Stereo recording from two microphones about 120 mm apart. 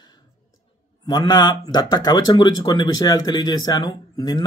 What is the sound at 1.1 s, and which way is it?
Speech, 35° left (ahead or behind).